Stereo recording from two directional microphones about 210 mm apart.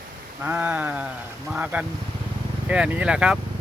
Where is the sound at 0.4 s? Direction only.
10° right (ahead or behind).